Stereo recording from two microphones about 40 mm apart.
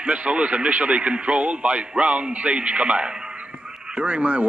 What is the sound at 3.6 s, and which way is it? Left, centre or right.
Radio, centre.